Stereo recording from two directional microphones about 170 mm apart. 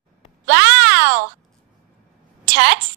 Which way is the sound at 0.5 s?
90° right.